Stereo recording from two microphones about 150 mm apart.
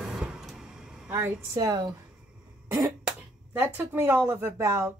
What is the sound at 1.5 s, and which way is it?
Speech, 25° right (ahead or behind).